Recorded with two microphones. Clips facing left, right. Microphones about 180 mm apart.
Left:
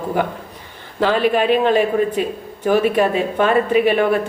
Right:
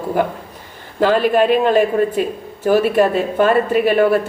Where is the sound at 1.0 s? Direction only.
45° right (ahead or behind).